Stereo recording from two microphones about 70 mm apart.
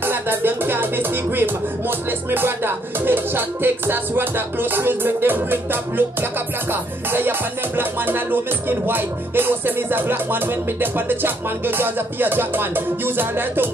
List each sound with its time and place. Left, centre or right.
0.0 s music: right